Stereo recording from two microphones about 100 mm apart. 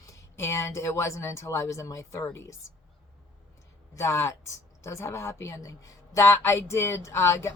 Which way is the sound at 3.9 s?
30° left (ahead or behind).